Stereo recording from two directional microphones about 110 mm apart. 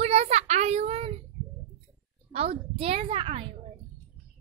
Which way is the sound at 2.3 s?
65° right (ahead or behind).